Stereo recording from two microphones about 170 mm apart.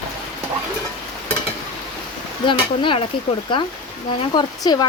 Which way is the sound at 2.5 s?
30° left (ahead or behind).